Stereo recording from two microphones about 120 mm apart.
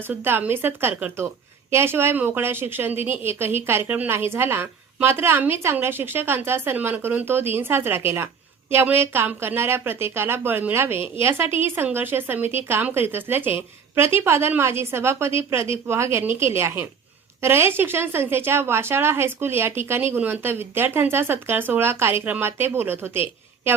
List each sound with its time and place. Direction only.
0.1 s a woman's voice: 15° right (ahead or behind)